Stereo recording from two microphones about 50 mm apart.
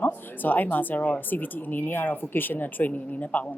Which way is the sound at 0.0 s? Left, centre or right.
Left.